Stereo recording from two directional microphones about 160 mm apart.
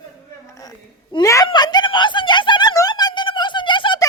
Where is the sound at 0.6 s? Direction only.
25° left (ahead or behind).